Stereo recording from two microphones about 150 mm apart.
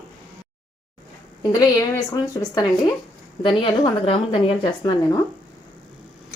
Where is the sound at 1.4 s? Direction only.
25° left (ahead or behind).